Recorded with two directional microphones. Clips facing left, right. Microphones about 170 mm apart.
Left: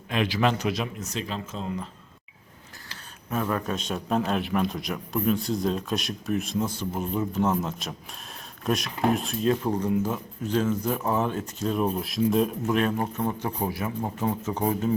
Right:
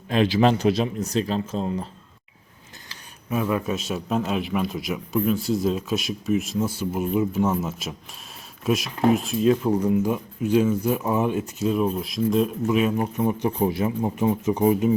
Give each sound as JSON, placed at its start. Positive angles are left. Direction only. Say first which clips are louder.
{"t": 0.1, "sound": "speech", "louder": "right 6 dB", "side_deg": -30}
{"t": 3.2, "sound": "speech", "louder": "right 3 dB", "side_deg": -10}